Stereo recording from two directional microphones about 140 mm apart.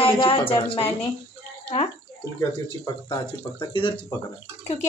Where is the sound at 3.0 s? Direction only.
40° left (ahead or behind).